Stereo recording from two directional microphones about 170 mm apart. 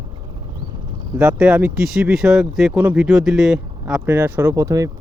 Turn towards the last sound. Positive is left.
turn(degrees=-20)  # may be behind; listen again after turning